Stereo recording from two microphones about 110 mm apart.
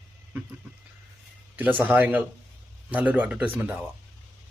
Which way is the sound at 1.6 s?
15° right (ahead or behind).